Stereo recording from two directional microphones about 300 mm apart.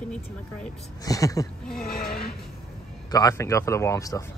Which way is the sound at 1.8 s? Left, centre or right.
Left.